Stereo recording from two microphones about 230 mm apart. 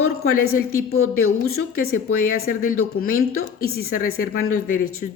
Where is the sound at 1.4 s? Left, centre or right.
Left.